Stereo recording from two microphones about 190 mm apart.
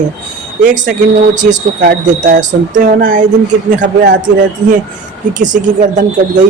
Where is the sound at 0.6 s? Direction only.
40° right (ahead or behind).